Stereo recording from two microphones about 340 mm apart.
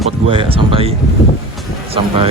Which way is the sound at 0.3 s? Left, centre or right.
Centre.